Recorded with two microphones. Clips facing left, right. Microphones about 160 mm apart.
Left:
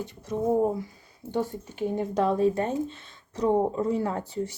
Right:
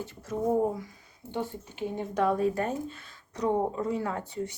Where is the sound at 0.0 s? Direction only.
20° left (ahead or behind).